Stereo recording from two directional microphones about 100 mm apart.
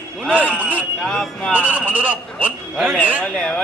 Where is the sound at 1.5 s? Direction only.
15° right (ahead or behind).